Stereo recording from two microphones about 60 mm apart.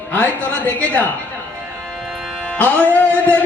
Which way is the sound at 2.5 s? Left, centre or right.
Left.